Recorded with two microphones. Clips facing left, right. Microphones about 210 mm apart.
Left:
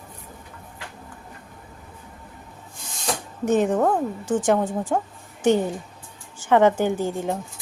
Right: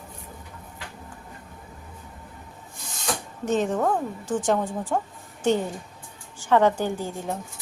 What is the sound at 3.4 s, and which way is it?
Speech, 15° left (ahead or behind).